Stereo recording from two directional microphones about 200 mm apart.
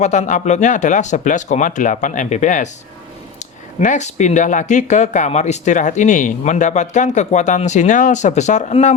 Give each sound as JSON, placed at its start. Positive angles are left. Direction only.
{"t": 0.0, "sound": "speech", "side_deg": 35}
{"t": 3.8, "sound": "speech", "side_deg": 35}